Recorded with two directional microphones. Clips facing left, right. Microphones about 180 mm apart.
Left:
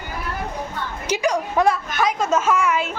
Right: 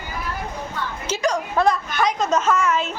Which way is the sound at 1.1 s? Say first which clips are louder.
Left 2 dB; 15° left (ahead or behind).